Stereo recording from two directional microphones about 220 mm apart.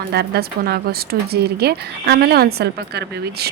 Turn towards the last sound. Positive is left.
turn(degrees=-45)  # may be behind; listen again after turning